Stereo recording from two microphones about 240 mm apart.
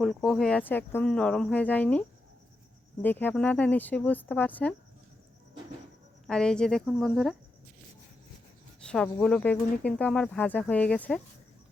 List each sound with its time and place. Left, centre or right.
0.0 s speech: centre
6.2 s speech: centre
9.2 s speech: centre